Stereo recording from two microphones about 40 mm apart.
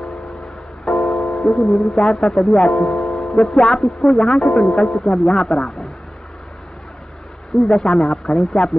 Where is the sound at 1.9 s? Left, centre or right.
Centre.